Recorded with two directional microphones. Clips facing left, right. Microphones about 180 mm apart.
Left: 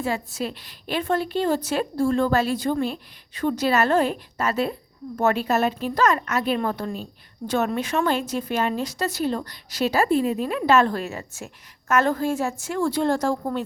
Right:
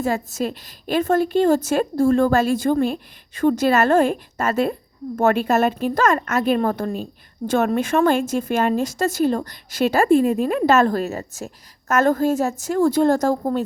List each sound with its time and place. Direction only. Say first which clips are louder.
0.0 s a woman's voice: right 4 dB; 45° right (ahead or behind)